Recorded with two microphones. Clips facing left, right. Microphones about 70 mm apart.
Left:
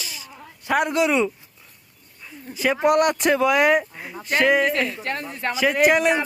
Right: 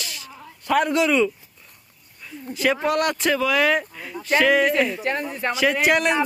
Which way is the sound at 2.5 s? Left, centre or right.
Centre.